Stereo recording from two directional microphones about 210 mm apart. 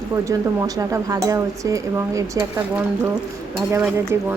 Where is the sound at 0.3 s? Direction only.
15° right (ahead or behind).